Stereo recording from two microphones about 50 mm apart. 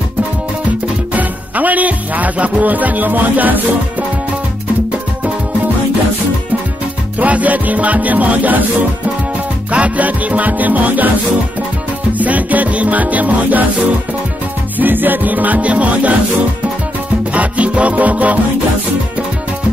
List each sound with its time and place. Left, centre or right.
1.1 s music: right
7.2 s music: right
9.7 s music: right
12.1 s music: right
14.8 s music: right
17.3 s music: right